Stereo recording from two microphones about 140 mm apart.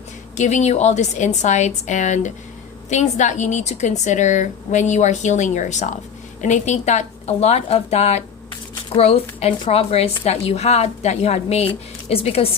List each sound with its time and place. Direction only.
0.3 s a woman's voice: 55° left (ahead or behind)